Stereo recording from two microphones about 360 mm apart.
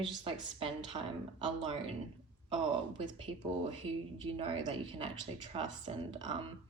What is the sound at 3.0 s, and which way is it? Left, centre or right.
Speech, centre.